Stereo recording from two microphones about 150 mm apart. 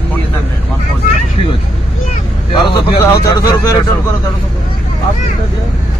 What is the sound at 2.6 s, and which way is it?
A man's voice, 25° left (ahead or behind).